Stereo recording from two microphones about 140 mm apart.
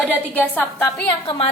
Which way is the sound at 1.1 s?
35° left (ahead or behind).